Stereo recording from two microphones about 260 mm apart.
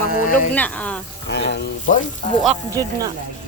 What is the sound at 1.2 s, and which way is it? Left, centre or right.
Speech, left.